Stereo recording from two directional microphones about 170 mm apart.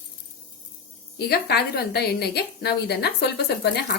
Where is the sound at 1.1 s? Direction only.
70° left (ahead or behind).